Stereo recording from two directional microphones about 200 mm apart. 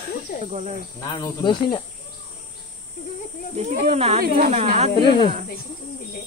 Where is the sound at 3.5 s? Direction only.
35° right (ahead or behind).